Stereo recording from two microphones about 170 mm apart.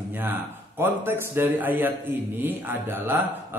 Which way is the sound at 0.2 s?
10° right (ahead or behind).